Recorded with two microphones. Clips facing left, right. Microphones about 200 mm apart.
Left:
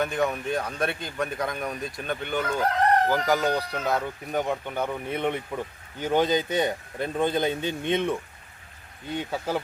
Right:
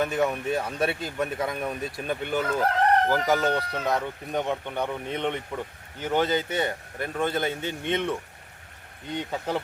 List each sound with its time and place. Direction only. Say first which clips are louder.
0.0 s speech: right 1 dB; 5° right (ahead or behind)